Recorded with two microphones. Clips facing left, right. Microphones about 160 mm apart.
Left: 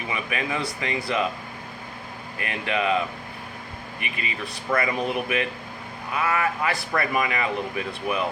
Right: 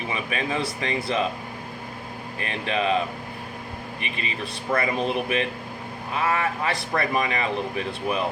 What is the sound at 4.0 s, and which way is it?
Speech, 30° right (ahead or behind).